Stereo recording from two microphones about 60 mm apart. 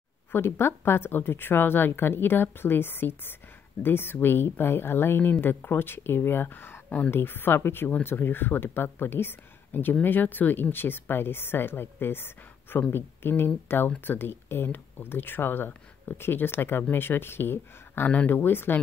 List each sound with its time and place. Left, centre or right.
0.3 s speech: left